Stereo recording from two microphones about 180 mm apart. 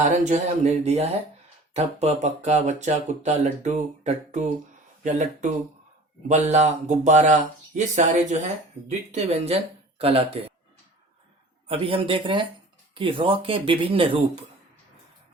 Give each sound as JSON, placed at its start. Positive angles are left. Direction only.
{"t": 0.0, "sound": "speech", "side_deg": -40}
{"t": 11.7, "sound": "speech", "side_deg": -30}